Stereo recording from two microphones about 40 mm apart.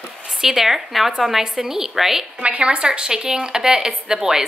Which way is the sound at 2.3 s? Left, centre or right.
Right.